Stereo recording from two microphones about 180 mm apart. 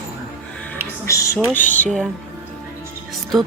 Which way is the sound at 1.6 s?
45° left (ahead or behind).